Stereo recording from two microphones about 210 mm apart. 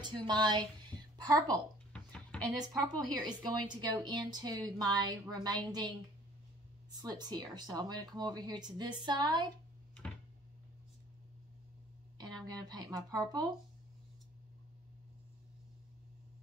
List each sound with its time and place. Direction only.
0.0 s a woman's voice: 20° right (ahead or behind)
12.4 s speech: 20° right (ahead or behind)